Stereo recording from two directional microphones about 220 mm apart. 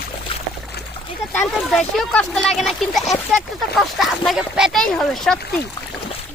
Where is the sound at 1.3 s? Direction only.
5° left (ahead or behind).